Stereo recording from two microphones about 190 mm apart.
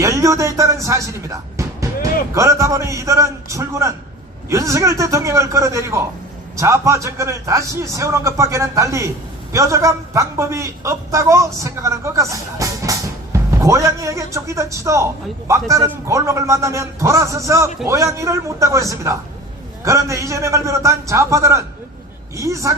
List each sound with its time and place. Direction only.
0.0 s music: 15° right (ahead or behind)
2.3 s a man's voice: 15° right (ahead or behind)
16.0 s a man's voice: 15° right (ahead or behind)